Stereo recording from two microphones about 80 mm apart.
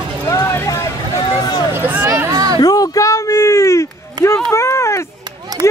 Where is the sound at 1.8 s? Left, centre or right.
Right.